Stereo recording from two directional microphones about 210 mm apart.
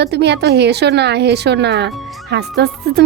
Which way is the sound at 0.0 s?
55° right (ahead or behind).